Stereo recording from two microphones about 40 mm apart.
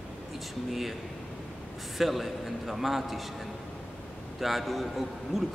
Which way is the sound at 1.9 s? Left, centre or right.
Centre.